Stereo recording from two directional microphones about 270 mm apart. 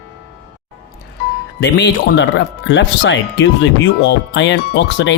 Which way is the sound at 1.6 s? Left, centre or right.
Left.